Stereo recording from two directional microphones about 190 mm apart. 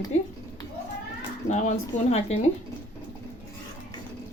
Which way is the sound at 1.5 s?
35° left (ahead or behind).